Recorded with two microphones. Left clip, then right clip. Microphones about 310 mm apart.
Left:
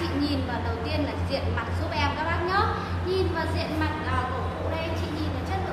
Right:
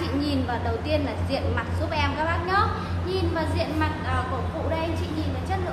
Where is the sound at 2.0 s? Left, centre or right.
Right.